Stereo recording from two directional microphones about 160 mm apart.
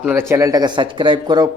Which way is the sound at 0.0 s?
10° right (ahead or behind).